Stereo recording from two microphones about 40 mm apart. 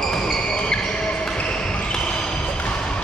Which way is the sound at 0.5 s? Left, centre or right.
Left.